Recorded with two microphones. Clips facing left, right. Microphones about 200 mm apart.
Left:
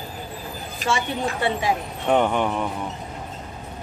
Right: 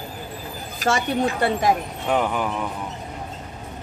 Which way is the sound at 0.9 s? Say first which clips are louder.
Right 3 dB; 45° right (ahead or behind).